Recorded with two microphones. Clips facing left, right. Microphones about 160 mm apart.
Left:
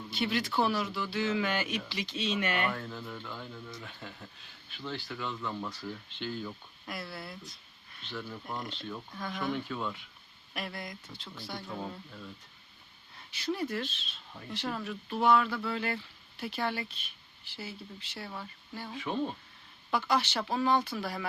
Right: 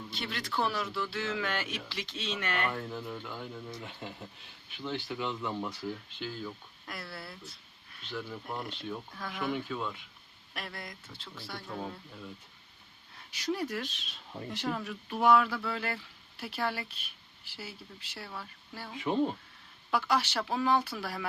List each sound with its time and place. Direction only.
0.1 s speech: 5° left (ahead or behind)
2.7 s speech: 10° right (ahead or behind)
13.4 s speech: 10° right (ahead or behind)